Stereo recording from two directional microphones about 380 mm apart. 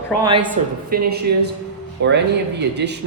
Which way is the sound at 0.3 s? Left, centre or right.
Centre.